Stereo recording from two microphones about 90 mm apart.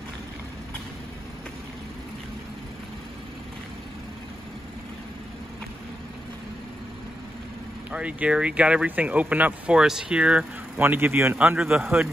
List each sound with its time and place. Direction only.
7.9 s speech: 15° right (ahead or behind)
11.3 s speech: 10° right (ahead or behind)